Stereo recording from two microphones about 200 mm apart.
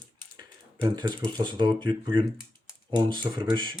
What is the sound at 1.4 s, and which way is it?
Speech, 25° right (ahead or behind).